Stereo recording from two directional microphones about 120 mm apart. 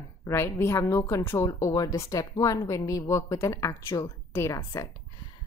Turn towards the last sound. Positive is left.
turn(degrees=25)  # may be behind; listen again after turning